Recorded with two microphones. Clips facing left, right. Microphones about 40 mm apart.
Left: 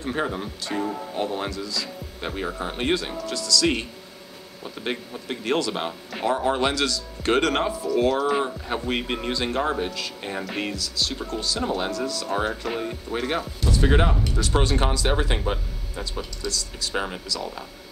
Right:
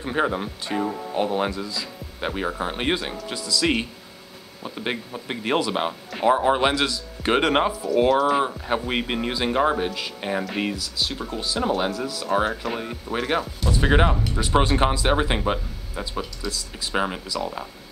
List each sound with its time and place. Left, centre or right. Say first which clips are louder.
0.0 s speech: right 3 dB; centre
13.7 s speech: right 1 dB; centre